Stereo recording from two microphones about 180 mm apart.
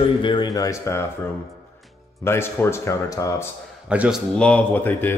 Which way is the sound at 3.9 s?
5° right (ahead or behind).